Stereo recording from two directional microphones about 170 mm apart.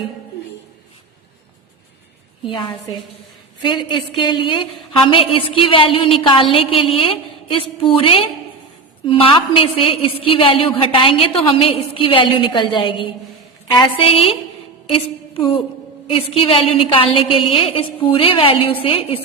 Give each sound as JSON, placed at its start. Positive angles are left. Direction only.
{"t": 2.5, "sound": "a woman's voice", "side_deg": 30}
{"t": 16.0, "sound": "a woman's voice", "side_deg": 30}